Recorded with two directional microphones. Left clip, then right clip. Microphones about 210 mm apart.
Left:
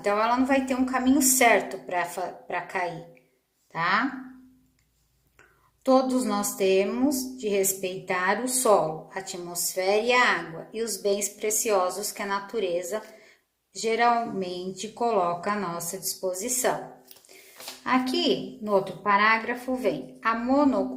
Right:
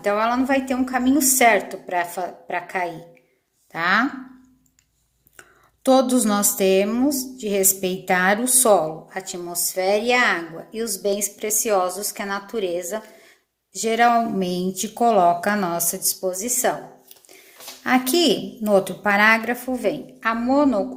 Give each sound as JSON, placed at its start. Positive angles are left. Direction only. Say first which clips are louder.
{"t": 0.0, "sound": "a woman's voice", "louder": "right 3 dB", "side_deg": -55}
{"t": 5.8, "sound": "a woman's voice", "louder": "right 5 dB", "side_deg": -55}
{"t": 17.8, "sound": "a woman's voice", "louder": "right 6 dB", "side_deg": -50}